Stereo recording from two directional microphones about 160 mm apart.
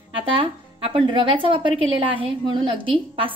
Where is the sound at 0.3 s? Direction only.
35° right (ahead or behind).